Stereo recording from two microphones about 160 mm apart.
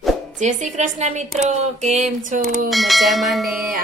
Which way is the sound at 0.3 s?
50° right (ahead or behind).